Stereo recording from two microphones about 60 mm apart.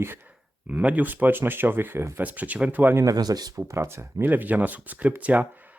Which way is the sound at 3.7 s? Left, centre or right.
Right.